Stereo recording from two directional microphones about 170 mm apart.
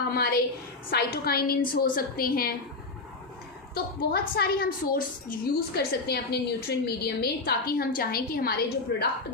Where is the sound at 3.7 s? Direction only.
70° left (ahead or behind).